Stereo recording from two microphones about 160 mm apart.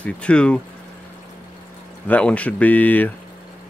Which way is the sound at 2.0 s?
10° left (ahead or behind).